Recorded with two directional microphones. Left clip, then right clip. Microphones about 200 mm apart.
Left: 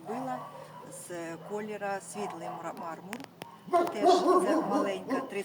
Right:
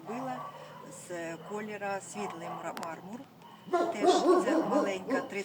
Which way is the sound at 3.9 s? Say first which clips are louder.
Left 1 dB; 10° right (ahead or behind).